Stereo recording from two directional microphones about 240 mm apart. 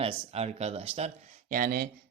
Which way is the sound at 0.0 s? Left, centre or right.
Right.